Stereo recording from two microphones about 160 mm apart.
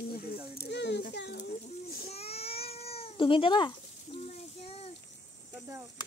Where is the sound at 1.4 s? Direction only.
65° left (ahead or behind).